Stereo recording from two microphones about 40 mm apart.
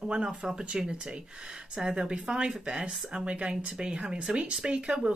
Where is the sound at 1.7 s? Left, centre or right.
Right.